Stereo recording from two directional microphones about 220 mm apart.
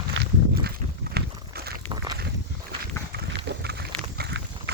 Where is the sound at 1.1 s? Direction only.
45° right (ahead or behind).